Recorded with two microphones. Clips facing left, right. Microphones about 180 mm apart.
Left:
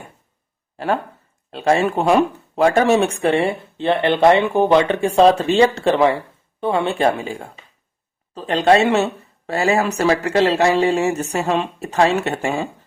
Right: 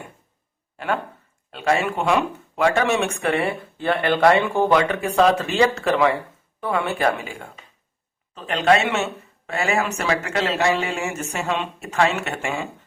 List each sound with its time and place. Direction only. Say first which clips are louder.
1.5 s speech: left 4 dB; 30° left (ahead or behind)